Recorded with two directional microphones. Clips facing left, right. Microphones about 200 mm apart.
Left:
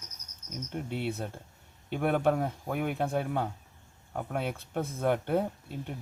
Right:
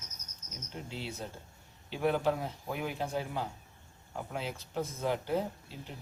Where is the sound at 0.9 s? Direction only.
60° left (ahead or behind).